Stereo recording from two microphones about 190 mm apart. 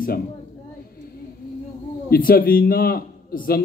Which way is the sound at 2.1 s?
50° left (ahead or behind).